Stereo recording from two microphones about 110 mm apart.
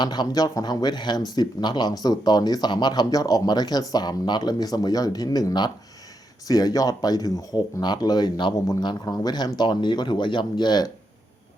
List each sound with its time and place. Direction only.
0.0 s speech: 40° left (ahead or behind)